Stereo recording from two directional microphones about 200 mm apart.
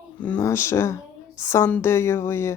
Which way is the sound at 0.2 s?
10° left (ahead or behind).